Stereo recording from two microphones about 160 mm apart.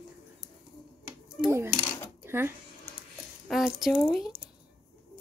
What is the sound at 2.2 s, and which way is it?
Speech, 15° right (ahead or behind).